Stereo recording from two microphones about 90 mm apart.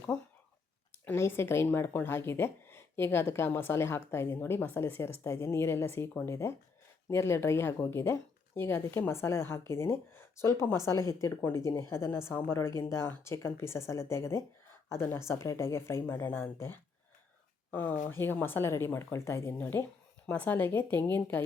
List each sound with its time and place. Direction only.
1.0 s a woman's voice: 30° left (ahead or behind)